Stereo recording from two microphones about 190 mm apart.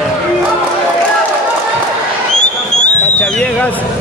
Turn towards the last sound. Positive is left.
turn(degrees=5)  # may be behind; listen again after turning